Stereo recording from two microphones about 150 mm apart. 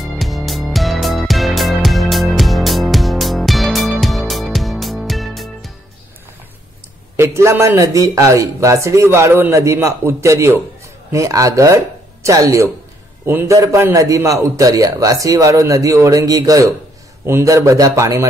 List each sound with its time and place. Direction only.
0.0 s music: centre (ahead or behind)
7.2 s a man's voice: 20° right (ahead or behind)